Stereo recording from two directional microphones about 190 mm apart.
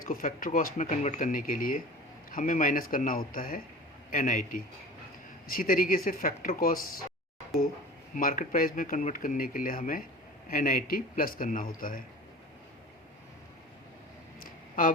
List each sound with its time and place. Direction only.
0.0 s speech: 50° left (ahead or behind)
8.1 s speech: 45° left (ahead or behind)
14.3 s a sound: 45° left (ahead or behind)